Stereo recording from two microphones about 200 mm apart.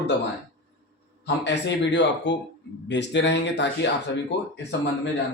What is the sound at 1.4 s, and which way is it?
Speech, 60° left (ahead or behind).